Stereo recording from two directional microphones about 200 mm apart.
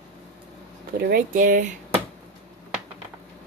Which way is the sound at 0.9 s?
50° right (ahead or behind).